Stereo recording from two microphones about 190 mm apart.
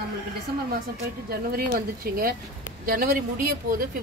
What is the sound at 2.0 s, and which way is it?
Speech, 50° right (ahead or behind).